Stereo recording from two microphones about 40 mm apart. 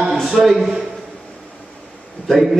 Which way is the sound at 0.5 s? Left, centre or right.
Centre.